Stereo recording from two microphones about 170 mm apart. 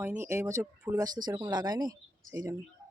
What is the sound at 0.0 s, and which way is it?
Speech, 10° right (ahead or behind).